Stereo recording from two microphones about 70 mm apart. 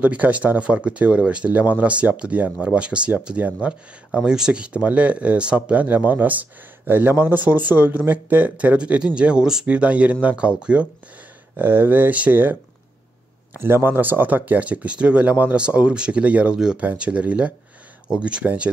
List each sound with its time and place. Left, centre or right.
0.0 s speech: right
11.5 s speech: right